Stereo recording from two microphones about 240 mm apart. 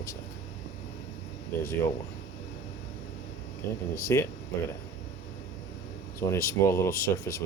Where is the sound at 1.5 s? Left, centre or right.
Centre.